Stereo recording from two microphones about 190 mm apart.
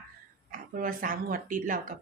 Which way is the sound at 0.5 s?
45° right (ahead or behind).